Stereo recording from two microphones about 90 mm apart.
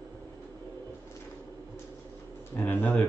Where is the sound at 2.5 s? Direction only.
20° left (ahead or behind).